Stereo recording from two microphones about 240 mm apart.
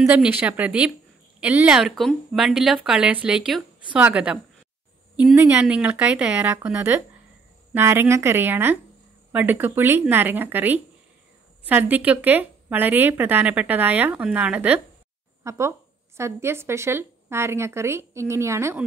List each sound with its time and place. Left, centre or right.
0.1 s a woman's voice: centre